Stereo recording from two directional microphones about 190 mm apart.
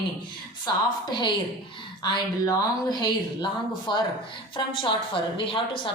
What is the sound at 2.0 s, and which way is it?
Speech, 20° left (ahead or behind).